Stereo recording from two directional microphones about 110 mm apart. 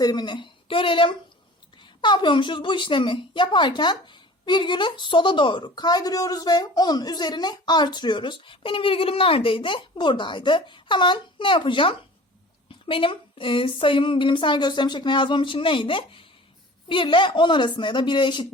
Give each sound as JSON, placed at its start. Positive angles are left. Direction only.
{"t": 0.0, "sound": "a woman's voice", "side_deg": 40}